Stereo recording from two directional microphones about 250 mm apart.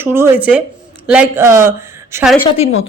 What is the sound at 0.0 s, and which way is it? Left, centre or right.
A woman's voice, centre.